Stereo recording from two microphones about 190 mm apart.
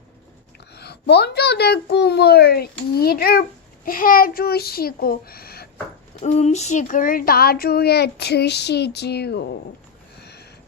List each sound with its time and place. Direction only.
0.8 s a child's voice: 60° left (ahead or behind)
6.2 s speech: 35° left (ahead or behind); by 9.6 s 60° left (ahead or behind)
10.2 s a sound: 60° left (ahead or behind)